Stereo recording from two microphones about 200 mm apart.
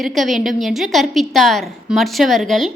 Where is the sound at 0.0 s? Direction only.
Centre (ahead or behind).